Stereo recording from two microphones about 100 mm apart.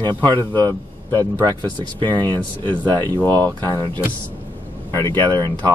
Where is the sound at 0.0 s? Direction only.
45° right (ahead or behind).